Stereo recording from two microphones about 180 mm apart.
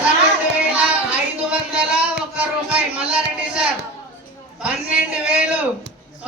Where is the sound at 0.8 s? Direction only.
5° right (ahead or behind).